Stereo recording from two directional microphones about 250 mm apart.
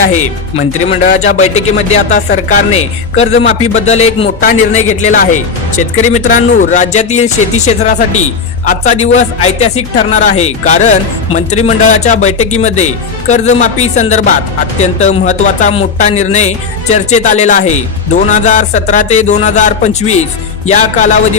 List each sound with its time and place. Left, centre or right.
0.9 s speech: left